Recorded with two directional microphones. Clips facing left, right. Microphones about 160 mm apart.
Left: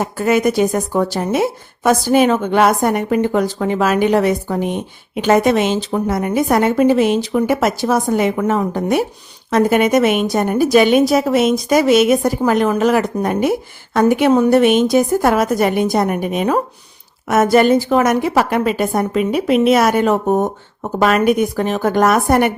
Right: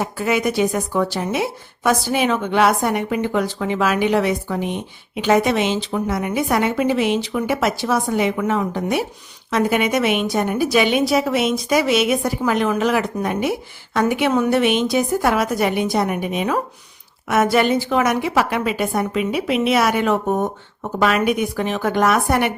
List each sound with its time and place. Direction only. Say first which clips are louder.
0.0 s a woman's voice: left 5 dB; 45° left (ahead or behind)